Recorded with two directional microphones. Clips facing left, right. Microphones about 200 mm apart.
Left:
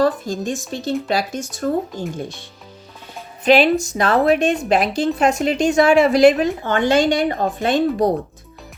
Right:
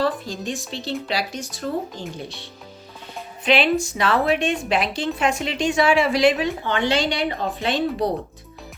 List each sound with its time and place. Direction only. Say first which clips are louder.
0.0 s a woman's voice: left 5 dB; 45° left (ahead or behind)